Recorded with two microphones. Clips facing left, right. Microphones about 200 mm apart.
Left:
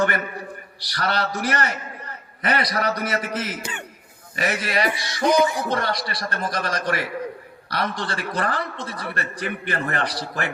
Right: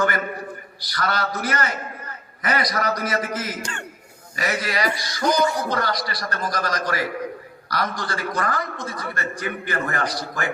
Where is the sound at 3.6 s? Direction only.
10° left (ahead or behind).